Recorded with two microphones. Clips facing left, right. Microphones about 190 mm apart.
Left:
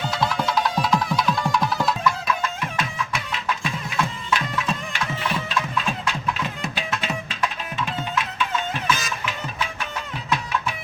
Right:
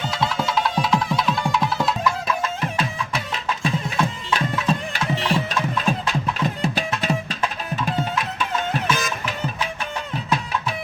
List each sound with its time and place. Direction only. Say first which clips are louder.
0.1 s music: even; centre (ahead or behind)
2.2 s music: right 2 dB; 35° right (ahead or behind)
5.5 s music: right 3 dB; 40° right (ahead or behind)
9.0 s music: right 3 dB; 50° right (ahead or behind)